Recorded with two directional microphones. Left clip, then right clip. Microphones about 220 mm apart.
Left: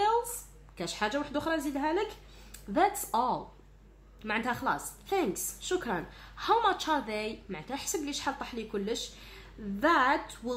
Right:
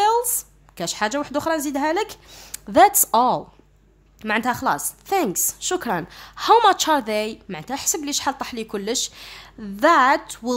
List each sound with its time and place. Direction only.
0.7 s a woman's voice: 35° right (ahead or behind)